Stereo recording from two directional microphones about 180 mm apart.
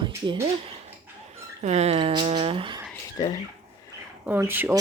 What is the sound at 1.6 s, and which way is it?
Speech, 40° right (ahead or behind).